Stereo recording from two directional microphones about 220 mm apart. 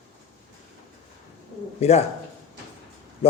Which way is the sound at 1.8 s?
30° left (ahead or behind).